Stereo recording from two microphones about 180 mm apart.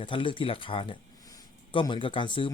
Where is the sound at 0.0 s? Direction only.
30° left (ahead or behind).